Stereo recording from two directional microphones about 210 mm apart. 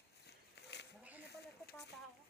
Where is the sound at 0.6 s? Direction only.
55° left (ahead or behind).